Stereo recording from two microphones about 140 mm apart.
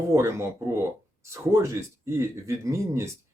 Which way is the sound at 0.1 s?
20° right (ahead or behind).